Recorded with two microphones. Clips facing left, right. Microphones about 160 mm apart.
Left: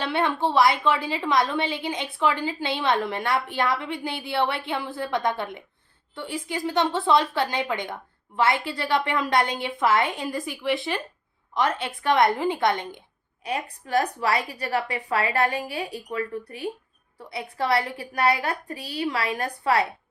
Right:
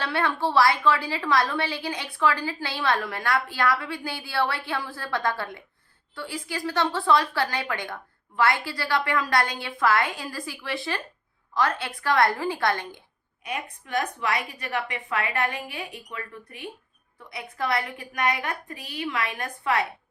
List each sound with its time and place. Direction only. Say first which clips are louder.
0.0 s a woman's voice: left 2 dB; 20° left (ahead or behind)
13.4 s a woman's voice: left 4 dB; 35° left (ahead or behind)